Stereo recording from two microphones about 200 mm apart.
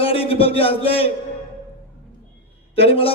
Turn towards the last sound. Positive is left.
turn(degrees=30)  # may be behind; listen again after turning